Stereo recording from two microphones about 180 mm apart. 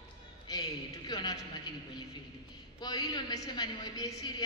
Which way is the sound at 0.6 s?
20° left (ahead or behind).